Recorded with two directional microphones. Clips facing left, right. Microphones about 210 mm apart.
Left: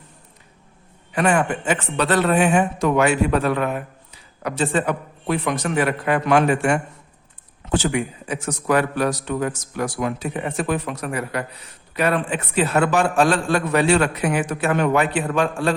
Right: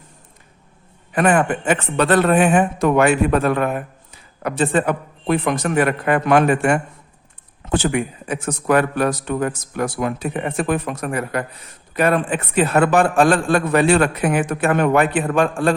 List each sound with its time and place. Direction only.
1.1 s a man's voice: 55° right (ahead or behind)